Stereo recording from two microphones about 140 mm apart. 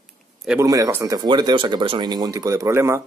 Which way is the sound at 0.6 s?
25° right (ahead or behind).